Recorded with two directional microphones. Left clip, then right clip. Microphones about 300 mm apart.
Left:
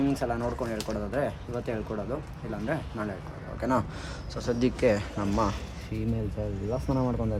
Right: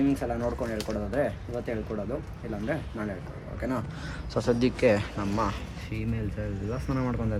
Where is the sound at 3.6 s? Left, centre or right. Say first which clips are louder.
Left 5 dB; centre.